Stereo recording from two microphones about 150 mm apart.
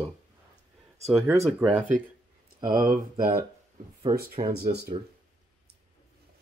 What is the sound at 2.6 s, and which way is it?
Speech, 65° right (ahead or behind).